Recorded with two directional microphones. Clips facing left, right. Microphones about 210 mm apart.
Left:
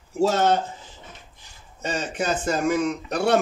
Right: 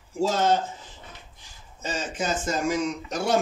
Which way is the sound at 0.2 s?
65° left (ahead or behind).